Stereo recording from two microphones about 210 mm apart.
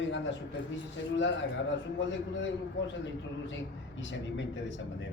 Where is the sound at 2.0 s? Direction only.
60° left (ahead or behind).